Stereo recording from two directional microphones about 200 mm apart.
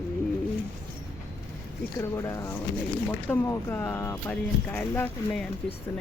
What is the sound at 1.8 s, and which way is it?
Speech, 15° left (ahead or behind).